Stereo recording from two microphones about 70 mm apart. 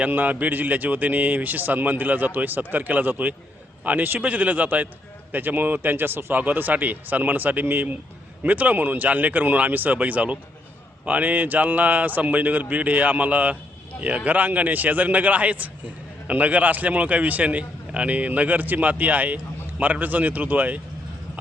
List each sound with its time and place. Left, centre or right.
0.1 s speech: right